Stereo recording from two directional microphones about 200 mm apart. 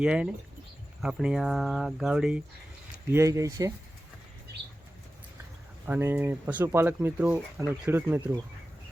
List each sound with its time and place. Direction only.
0.0 s speech: 5° right (ahead or behind)
3.1 s speech: 15° right (ahead or behind)
5.8 s speech: 10° right (ahead or behind)